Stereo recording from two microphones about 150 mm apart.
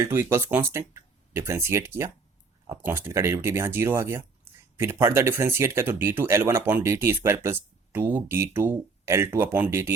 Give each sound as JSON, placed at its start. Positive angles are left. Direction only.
{"t": 0.0, "sound": "speech", "side_deg": -20}